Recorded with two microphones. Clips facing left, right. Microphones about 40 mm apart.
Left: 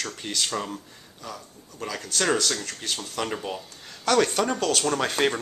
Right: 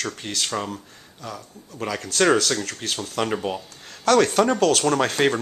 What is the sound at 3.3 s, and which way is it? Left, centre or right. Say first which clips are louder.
Speech: right 5 dB; centre.